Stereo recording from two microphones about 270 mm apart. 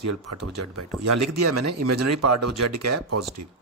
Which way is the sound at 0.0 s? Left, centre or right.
Right.